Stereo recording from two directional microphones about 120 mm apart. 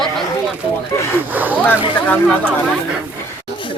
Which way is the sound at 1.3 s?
15° right (ahead or behind).